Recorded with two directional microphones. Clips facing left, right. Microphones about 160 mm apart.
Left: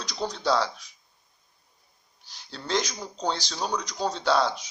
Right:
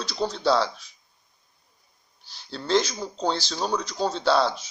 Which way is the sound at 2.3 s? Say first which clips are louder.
Right 6 dB; 35° right (ahead or behind).